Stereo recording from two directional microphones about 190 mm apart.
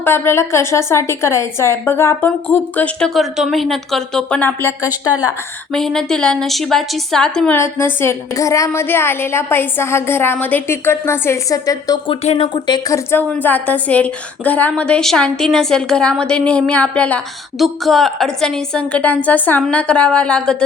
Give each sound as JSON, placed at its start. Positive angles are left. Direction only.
{"t": 0.0, "sound": "a woman's voice", "side_deg": 15}
{"t": 5.7, "sound": "a woman's voice", "side_deg": 0}
{"t": 12.2, "sound": "a woman's voice", "side_deg": 30}